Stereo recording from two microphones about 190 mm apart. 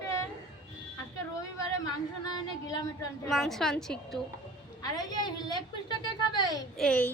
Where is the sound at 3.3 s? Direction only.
Centre (ahead or behind).